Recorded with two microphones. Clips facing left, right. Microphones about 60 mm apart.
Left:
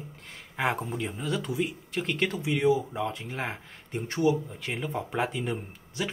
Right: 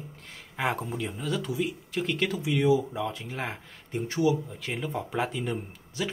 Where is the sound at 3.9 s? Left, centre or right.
Left.